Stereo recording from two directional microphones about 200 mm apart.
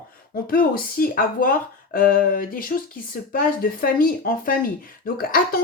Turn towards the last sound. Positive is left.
turn(degrees=45)  # may be behind; listen again after turning